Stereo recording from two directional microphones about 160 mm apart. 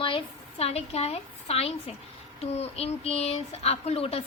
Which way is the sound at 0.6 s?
40° left (ahead or behind).